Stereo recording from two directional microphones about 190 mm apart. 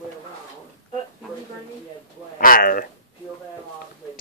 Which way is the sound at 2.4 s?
50° left (ahead or behind).